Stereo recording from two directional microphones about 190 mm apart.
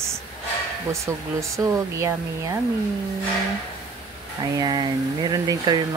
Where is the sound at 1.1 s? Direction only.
15° right (ahead or behind).